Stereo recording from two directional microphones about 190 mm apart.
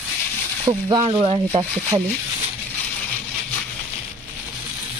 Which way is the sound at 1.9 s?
20° right (ahead or behind).